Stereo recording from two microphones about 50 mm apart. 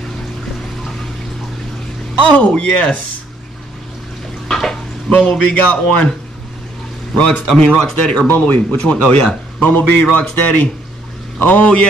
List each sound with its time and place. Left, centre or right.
2.2 s a man's voice: left
4.5 s stir: centre
5.2 s a man's voice: left
7.2 s a man's voice: left
9.7 s a man's voice: left